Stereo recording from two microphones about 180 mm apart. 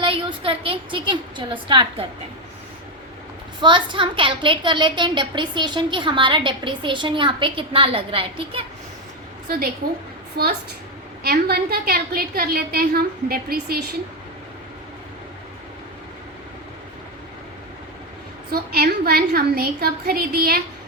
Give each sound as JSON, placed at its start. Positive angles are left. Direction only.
{"t": 0.0, "sound": "a woman's voice", "side_deg": -30}
{"t": 3.6, "sound": "a child's voice", "side_deg": -25}
{"t": 10.4, "sound": "a woman's voice", "side_deg": -60}
{"t": 18.5, "sound": "a woman's voice", "side_deg": -60}